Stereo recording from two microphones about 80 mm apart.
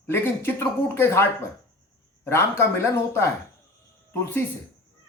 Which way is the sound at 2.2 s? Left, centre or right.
Left.